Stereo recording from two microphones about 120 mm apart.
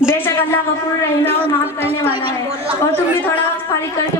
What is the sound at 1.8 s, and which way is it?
Speech, 55° right (ahead or behind).